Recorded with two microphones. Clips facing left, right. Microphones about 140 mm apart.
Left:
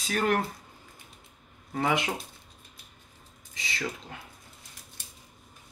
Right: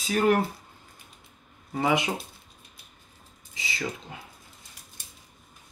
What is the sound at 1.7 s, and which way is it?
Speech, 5° right (ahead or behind).